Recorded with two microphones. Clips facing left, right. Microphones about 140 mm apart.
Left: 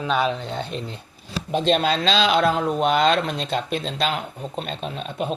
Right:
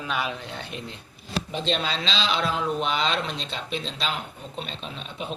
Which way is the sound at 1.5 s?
50° left (ahead or behind).